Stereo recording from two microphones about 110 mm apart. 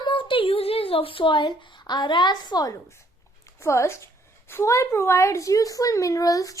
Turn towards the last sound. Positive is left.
turn(degrees=30)  # may be behind; listen again after turning